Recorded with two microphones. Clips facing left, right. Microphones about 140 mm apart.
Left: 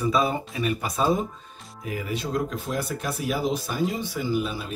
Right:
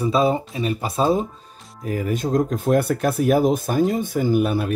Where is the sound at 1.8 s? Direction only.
45° right (ahead or behind).